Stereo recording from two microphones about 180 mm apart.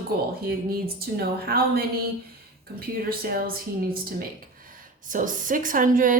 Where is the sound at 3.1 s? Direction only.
55° right (ahead or behind).